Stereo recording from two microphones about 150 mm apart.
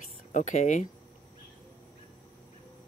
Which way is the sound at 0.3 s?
55° left (ahead or behind).